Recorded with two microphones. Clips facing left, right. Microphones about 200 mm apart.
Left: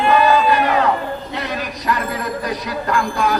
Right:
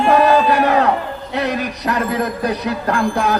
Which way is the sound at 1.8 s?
65° right (ahead or behind).